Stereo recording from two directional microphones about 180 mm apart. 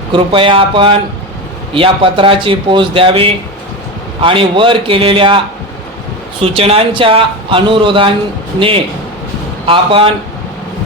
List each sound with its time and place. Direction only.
0.1 s a man's voice: 30° right (ahead or behind)
6.4 s a man's voice: 35° right (ahead or behind)